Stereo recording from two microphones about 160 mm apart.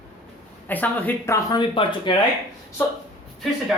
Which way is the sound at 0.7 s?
10° left (ahead or behind).